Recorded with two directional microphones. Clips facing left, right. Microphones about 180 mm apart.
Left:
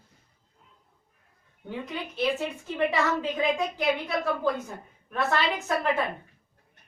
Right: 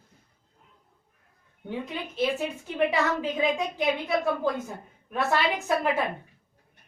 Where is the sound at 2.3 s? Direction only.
10° right (ahead or behind).